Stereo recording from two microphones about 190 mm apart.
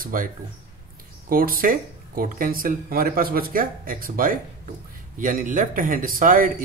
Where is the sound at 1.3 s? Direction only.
50° right (ahead or behind).